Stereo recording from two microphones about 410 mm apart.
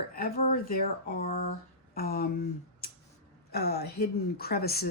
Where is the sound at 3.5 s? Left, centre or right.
Left.